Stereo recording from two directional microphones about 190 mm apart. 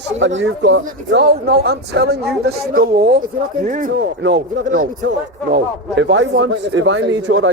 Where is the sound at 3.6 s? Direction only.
45° right (ahead or behind).